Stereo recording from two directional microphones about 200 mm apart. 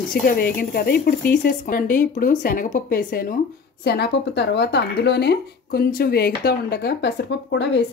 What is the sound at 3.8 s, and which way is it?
Speech, 55° left (ahead or behind).